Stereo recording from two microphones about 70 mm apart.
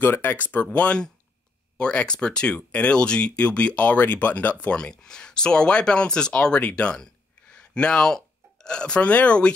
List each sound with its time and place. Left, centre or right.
0.0 s speech: left